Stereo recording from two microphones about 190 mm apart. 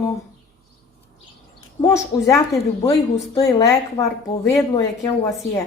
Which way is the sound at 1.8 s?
15° left (ahead or behind).